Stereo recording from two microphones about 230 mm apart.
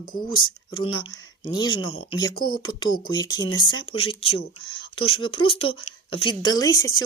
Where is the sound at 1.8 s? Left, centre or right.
Left.